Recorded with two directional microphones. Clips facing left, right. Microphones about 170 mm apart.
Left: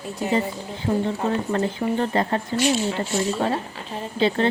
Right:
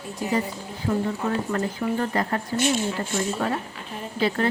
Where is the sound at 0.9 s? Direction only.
25° left (ahead or behind).